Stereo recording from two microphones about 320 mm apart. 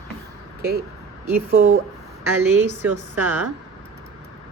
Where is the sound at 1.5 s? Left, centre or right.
Right.